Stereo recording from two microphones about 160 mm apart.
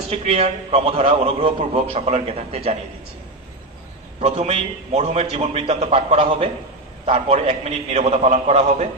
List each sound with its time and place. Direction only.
0.1 s a man's voice: 40° right (ahead or behind)
4.2 s a man's voice: 40° right (ahead or behind)